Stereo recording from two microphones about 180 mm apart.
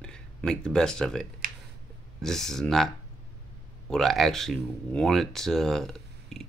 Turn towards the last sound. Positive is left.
turn(degrees=0)  # may be behind; listen again after turning